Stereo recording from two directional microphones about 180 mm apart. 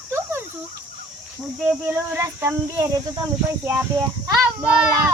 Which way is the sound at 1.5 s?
10° right (ahead or behind).